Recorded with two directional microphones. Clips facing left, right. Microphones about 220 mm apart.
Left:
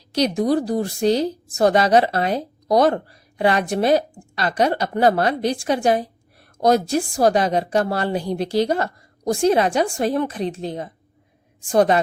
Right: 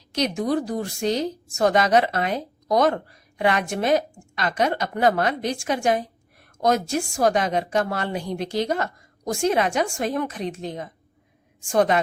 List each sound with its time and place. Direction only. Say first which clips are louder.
0.1 s a woman's voice: left 4 dB; 35° left (ahead or behind)